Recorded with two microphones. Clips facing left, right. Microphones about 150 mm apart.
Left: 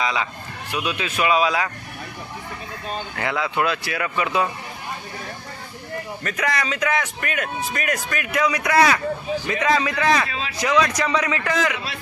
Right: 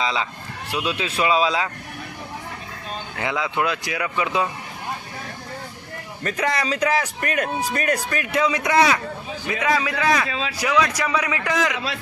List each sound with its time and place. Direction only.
0.0 s speech: 25° right (ahead or behind)
3.2 s speech: 15° right (ahead or behind)
6.2 s a man's voice: 30° right (ahead or behind)
9.5 s speech: 10° right (ahead or behind)